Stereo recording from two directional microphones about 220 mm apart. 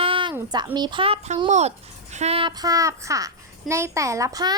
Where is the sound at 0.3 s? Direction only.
20° right (ahead or behind).